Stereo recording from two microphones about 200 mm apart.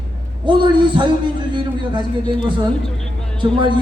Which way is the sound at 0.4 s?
25° right (ahead or behind).